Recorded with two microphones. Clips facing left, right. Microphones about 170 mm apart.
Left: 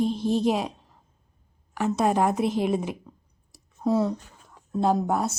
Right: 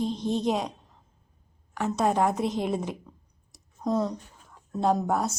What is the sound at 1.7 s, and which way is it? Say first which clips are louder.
A woman's voice: left 2 dB; 5° left (ahead or behind).